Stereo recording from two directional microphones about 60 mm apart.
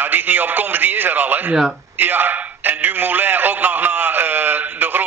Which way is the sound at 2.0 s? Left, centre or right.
Right.